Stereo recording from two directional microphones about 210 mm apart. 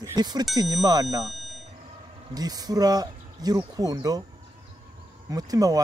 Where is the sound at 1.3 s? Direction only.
Centre (ahead or behind).